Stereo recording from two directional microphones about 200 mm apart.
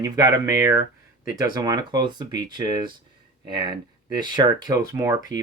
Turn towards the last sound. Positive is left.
turn(degrees=-15)  # may be behind; listen again after turning